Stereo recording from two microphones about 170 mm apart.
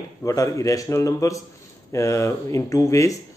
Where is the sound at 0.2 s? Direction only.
20° left (ahead or behind).